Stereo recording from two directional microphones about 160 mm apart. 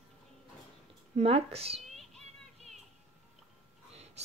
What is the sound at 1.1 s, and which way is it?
Speech, 40° right (ahead or behind).